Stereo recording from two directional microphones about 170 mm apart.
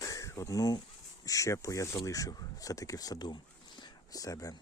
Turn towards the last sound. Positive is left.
turn(degrees=20)  # may be behind; listen again after turning